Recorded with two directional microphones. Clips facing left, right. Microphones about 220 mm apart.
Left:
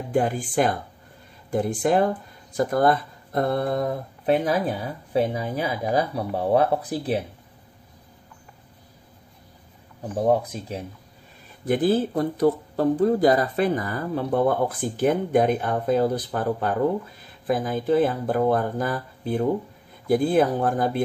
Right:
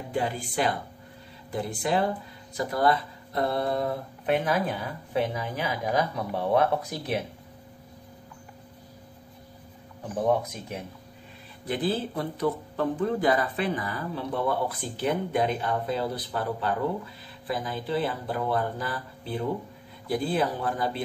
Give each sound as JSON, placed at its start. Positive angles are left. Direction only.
{"t": 0.1, "sound": "speech", "side_deg": 50}
{"t": 4.3, "sound": "speech", "side_deg": 35}
{"t": 10.2, "sound": "speech", "side_deg": 30}
{"t": 11.6, "sound": "speech", "side_deg": 45}